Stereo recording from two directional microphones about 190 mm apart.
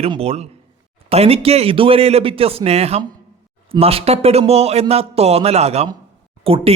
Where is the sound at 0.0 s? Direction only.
30° right (ahead or behind).